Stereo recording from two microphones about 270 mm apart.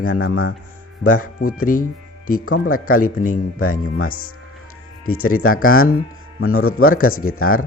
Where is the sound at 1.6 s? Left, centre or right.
Left.